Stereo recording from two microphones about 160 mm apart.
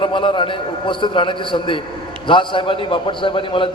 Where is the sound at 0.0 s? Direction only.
30° left (ahead or behind).